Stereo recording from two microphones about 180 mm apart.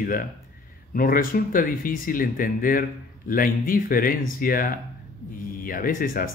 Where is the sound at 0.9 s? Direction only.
50° left (ahead or behind).